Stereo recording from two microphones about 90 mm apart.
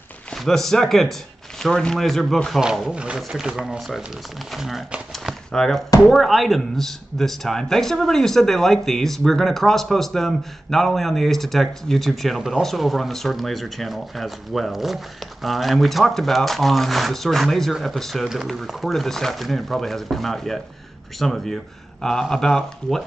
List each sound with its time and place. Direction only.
0.3 s speech: 5° left (ahead or behind)
5.1 s a sound: 5° left (ahead or behind)
6.0 s speech: centre (ahead or behind)